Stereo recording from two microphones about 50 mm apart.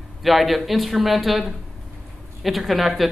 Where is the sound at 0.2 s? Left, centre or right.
Centre.